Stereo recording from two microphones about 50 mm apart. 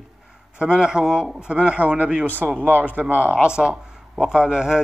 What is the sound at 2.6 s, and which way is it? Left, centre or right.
A man's voice, right.